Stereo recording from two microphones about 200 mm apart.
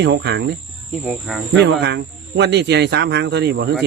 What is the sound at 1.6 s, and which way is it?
A man's voice, 55° right (ahead or behind).